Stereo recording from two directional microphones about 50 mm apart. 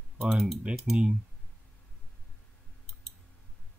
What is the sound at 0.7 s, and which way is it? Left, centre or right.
Speech, right.